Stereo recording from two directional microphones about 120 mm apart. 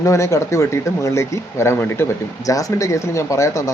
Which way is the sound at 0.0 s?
25° left (ahead or behind).